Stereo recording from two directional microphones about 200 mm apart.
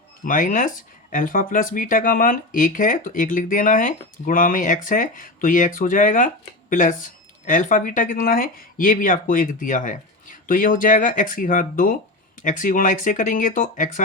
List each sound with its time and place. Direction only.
0.3 s speech: 40° left (ahead or behind)